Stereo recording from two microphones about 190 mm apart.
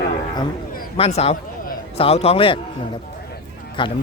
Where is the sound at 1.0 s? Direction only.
35° left (ahead or behind).